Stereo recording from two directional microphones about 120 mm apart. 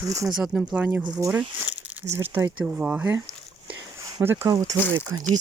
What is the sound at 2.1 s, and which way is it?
Speech, 20° right (ahead or behind).